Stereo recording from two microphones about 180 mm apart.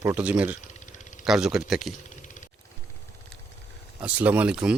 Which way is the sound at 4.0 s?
10° right (ahead or behind).